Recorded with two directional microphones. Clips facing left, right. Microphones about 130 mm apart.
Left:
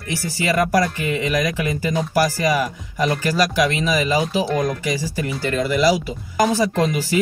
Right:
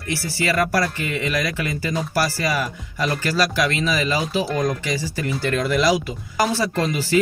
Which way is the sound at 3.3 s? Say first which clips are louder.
Left 1 dB; 15° left (ahead or behind).